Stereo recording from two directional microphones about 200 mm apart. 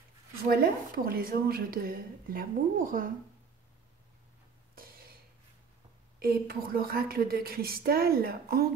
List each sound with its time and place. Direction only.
0.5 s a woman's voice: 50° right (ahead or behind)
6.1 s a woman's voice: 50° right (ahead or behind)